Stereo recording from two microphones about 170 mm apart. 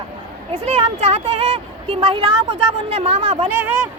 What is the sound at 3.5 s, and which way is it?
Speech, 15° right (ahead or behind).